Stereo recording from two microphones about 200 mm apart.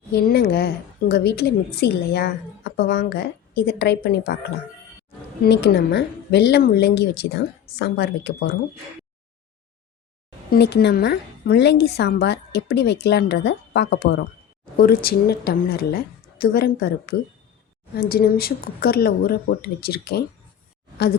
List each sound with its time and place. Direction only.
0.1 s speech: 50° left (ahead or behind)
5.4 s speech: 55° left (ahead or behind)
10.5 s speech: 55° left (ahead or behind)